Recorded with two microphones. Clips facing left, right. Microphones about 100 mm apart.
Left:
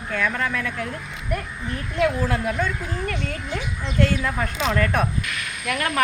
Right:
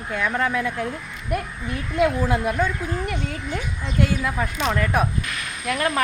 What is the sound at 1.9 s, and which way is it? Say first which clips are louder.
Speech: right 2 dB; 15° right (ahead or behind).